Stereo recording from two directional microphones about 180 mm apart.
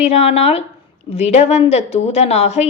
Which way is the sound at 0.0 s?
35° left (ahead or behind).